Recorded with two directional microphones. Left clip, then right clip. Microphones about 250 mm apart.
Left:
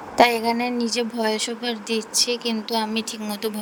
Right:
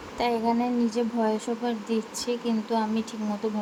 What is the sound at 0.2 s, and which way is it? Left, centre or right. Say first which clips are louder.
A woman's voice: left 8 dB; left.